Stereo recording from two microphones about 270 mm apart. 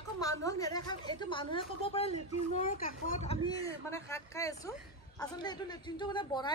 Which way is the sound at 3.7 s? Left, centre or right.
Centre.